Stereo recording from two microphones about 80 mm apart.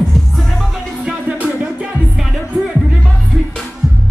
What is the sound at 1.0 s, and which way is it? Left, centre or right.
Music, centre.